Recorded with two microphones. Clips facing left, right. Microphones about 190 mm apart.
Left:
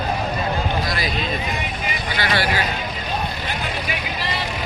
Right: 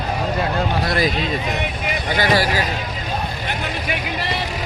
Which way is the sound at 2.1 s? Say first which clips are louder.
Right 5 dB; 45° right (ahead or behind).